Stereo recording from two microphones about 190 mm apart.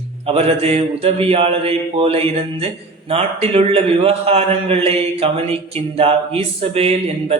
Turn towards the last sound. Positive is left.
turn(degrees=-30)  # may be behind; listen again after turning